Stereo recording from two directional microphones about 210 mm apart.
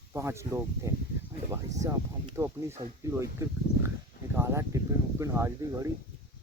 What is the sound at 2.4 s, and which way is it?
Speech, 10° right (ahead or behind).